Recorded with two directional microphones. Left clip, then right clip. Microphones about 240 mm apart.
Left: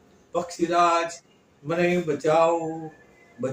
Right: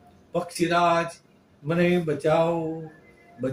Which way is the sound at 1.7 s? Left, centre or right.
Centre.